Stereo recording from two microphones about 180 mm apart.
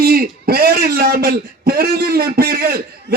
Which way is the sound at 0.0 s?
55° right (ahead or behind).